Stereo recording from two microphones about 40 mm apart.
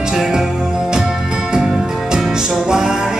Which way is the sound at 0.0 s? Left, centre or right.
Centre.